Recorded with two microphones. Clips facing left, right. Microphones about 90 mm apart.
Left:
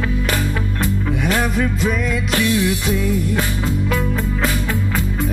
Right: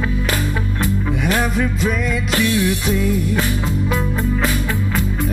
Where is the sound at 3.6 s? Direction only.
15° right (ahead or behind).